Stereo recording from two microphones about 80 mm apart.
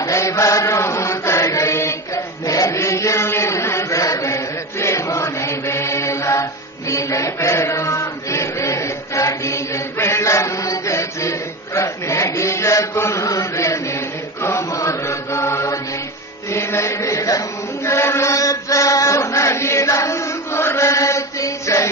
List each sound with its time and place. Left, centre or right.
0.1 s chant: left